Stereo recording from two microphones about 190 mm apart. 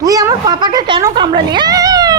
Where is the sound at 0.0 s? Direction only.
20° right (ahead or behind).